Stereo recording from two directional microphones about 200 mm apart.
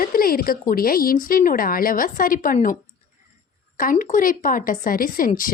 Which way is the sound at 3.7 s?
45° left (ahead or behind).